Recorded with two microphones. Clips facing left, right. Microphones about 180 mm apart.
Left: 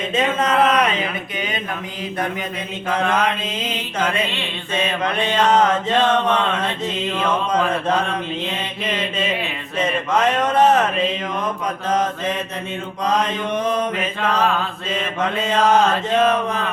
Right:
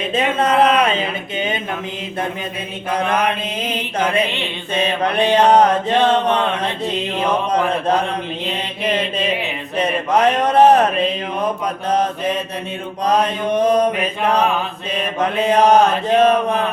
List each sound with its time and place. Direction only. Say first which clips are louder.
0.1 s mantra: right 2 dB; 30° right (ahead or behind)
0.6 s speech: right 2 dB; 30° right (ahead or behind)
2.9 s mantra: right 1 dB; 10° right (ahead or behind)
3.6 s mantra: right 3 dB; 30° right (ahead or behind)
5.4 s mantra: right 3 dB; 35° right (ahead or behind)
5.9 s mantra: right 2 dB; 15° right (ahead or behind)
7.2 s mantra: right 2 dB; 35° right (ahead or behind)
9.7 s mantra: right 3 dB; 35° right (ahead or behind)
13.1 s mantra: right 4 dB; 35° right (ahead or behind)
14.2 s mantra: right 2 dB; 15° right (ahead or behind)